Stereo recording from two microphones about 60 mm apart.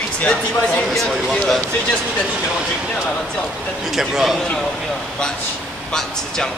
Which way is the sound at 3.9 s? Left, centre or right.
Centre.